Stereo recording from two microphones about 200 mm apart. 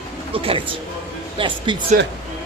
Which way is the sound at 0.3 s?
25° right (ahead or behind).